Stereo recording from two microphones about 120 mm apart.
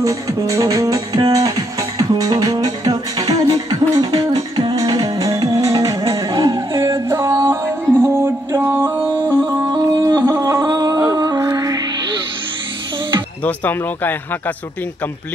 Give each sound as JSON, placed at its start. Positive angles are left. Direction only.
{"t": 0.0, "sound": "music", "side_deg": -30}
{"t": 9.7, "sound": "music", "side_deg": -35}
{"t": 10.4, "sound": "a sound", "side_deg": -30}
{"t": 11.1, "sound": "music", "side_deg": -35}
{"t": 13.4, "sound": "speech", "side_deg": 15}